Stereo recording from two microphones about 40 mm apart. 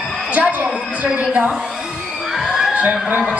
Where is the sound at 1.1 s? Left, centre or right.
Right.